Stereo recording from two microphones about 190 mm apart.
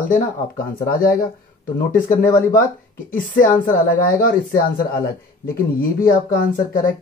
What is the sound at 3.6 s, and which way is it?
A man's voice, 45° left (ahead or behind).